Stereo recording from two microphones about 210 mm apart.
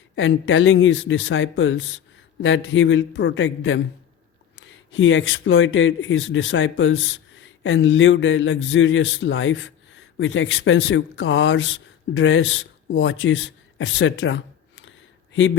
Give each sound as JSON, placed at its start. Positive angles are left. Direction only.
{"t": 0.2, "sound": "speech", "side_deg": 65}